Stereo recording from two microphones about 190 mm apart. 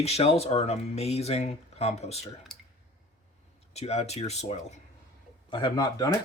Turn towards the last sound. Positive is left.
turn(degrees=20)  # may be behind; listen again after turning